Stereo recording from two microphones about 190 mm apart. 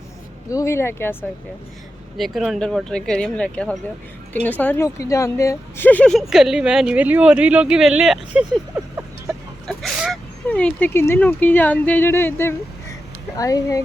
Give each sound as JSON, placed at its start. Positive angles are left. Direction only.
{"t": 0.5, "sound": "speech", "side_deg": 15}
{"t": 2.1, "sound": "speech", "side_deg": 0}
{"t": 9.6, "sound": "speech", "side_deg": 0}